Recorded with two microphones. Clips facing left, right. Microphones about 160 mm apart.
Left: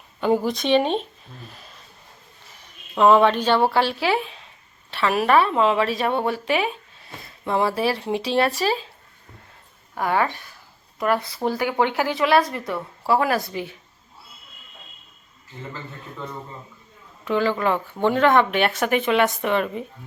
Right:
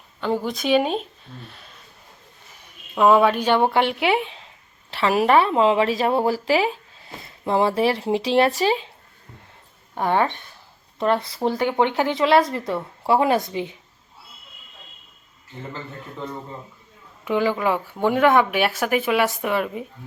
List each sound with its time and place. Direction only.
0.2 s speech: 15° left (ahead or behind)
0.4 s speech: centre (ahead or behind)
2.9 s speech: 10° right (ahead or behind)
9.9 s speech: 25° right (ahead or behind)
17.2 s speech: 15° right (ahead or behind)